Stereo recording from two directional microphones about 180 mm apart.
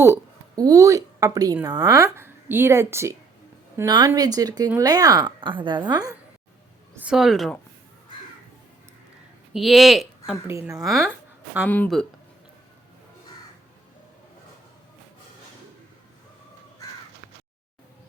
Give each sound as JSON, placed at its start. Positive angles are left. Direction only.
{"t": 0.0, "sound": "a woman's voice", "side_deg": -15}
{"t": 7.0, "sound": "speech", "side_deg": -5}
{"t": 9.5, "sound": "speech", "side_deg": 0}
{"t": 10.5, "sound": "a woman's voice", "side_deg": -15}
{"t": 10.8, "sound": "speech", "side_deg": 0}